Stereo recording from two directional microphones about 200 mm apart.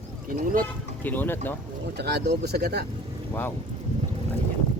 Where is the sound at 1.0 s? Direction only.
10° left (ahead or behind).